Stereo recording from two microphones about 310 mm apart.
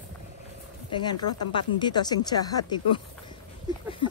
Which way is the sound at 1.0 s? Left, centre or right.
Centre.